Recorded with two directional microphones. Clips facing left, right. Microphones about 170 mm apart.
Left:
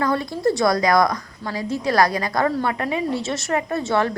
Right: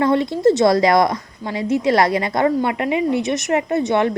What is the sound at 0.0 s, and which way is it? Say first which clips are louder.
A woman's voice: right 5 dB; 25° right (ahead or behind).